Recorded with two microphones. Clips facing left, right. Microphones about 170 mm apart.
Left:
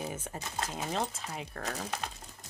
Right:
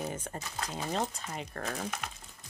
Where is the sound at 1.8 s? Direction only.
35° left (ahead or behind).